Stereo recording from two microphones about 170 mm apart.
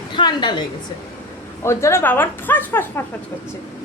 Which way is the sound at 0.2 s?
25° left (ahead or behind).